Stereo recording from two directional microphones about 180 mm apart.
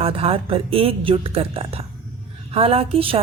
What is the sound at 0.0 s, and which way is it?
Speech, 30° right (ahead or behind).